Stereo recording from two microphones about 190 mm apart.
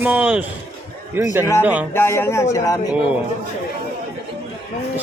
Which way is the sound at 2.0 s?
15° left (ahead or behind).